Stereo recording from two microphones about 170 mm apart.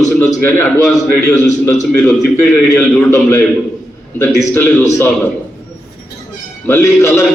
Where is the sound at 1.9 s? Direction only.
15° left (ahead or behind).